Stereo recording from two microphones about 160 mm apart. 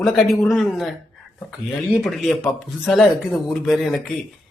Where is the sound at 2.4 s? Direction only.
15° left (ahead or behind).